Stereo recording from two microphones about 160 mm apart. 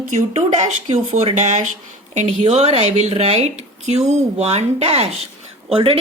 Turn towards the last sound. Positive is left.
turn(degrees=-35)  # may be behind; listen again after turning